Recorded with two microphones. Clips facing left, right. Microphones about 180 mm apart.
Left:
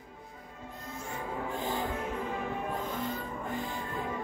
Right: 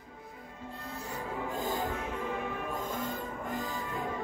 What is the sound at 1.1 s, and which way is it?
Music, 45° right (ahead or behind).